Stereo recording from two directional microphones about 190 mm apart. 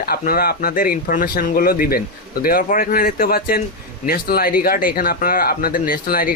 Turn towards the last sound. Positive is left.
turn(degrees=50)  # may be behind; listen again after turning